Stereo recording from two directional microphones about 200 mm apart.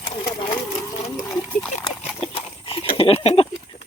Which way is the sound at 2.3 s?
30° left (ahead or behind).